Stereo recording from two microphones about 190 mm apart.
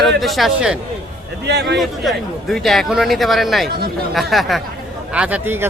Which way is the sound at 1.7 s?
Centre (ahead or behind).